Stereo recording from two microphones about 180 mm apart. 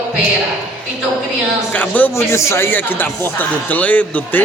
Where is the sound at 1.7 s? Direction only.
10° left (ahead or behind).